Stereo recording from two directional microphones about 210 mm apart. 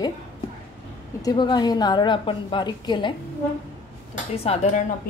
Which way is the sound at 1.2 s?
20° left (ahead or behind).